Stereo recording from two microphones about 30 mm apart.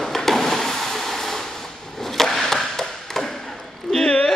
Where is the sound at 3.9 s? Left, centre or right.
Left.